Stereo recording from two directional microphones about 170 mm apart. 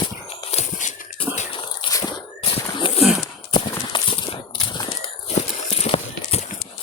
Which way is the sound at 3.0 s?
Centre (ahead or behind).